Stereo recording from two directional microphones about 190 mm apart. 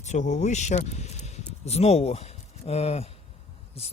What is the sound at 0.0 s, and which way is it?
Speech, 40° left (ahead or behind).